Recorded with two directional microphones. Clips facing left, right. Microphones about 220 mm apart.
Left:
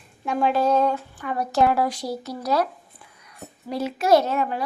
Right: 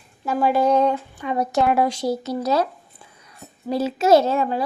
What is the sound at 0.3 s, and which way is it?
A woman's voice, 5° right (ahead or behind).